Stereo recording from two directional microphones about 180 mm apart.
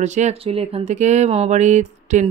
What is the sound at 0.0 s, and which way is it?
Speech, 40° right (ahead or behind).